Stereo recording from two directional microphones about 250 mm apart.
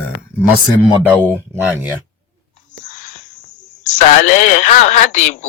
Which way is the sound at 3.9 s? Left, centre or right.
Left.